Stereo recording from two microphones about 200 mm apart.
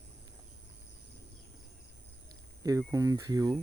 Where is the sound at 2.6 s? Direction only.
15° right (ahead or behind).